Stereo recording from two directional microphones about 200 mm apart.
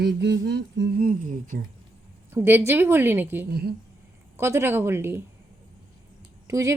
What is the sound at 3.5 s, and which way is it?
Speech, 55° right (ahead or behind).